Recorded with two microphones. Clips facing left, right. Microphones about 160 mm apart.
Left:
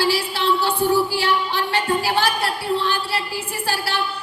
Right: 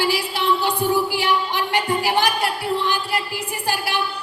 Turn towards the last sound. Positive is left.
turn(degrees=-15)  # may be behind; listen again after turning